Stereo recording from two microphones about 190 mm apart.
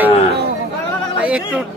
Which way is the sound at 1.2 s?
5° right (ahead or behind).